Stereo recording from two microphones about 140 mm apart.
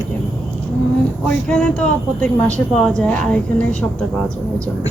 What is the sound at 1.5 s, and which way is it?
A woman's voice, 10° left (ahead or behind).